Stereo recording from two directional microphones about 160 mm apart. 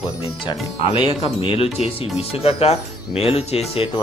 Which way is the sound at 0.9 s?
35° left (ahead or behind).